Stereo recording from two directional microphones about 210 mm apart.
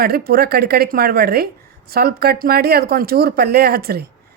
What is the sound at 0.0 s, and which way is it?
Speech, 45° right (ahead or behind).